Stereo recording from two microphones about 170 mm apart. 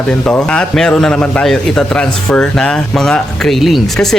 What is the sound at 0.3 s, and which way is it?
A man's voice, 5° left (ahead or behind).